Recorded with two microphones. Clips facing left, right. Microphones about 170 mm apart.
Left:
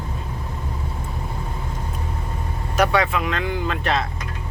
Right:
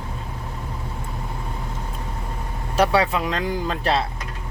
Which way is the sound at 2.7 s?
30° right (ahead or behind).